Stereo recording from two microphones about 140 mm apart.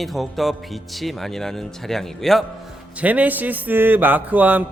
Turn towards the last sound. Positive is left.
turn(degrees=-10)  # may be behind; listen again after turning